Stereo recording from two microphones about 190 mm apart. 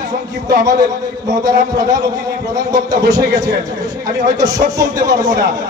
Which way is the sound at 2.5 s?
20° right (ahead or behind).